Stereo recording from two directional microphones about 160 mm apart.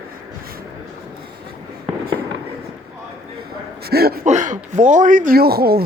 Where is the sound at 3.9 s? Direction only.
75° right (ahead or behind).